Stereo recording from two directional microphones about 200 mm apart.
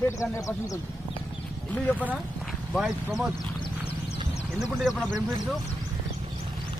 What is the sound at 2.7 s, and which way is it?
Speech, centre (ahead or behind).